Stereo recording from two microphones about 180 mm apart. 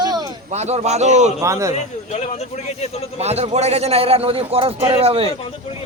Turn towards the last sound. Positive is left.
turn(degrees=-35)  # may be behind; listen again after turning